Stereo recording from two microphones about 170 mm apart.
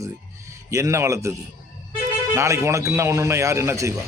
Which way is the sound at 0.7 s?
15° right (ahead or behind).